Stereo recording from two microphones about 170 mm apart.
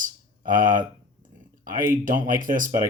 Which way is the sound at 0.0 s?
55° right (ahead or behind).